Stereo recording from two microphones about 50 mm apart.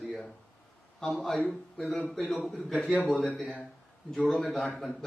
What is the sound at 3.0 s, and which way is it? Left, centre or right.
Speech, left.